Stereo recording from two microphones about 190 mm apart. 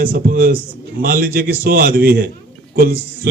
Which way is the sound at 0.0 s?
50° right (ahead or behind).